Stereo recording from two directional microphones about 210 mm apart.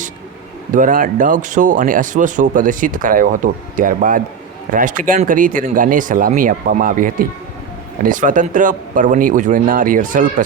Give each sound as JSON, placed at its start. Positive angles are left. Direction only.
{"t": 0.7, "sound": "speech", "side_deg": -40}